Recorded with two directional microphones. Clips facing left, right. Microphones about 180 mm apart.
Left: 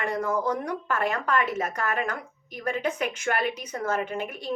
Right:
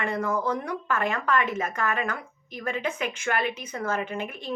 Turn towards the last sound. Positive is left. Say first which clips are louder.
# left 1 dB
turn(degrees=40)  # may be behind; listen again after turning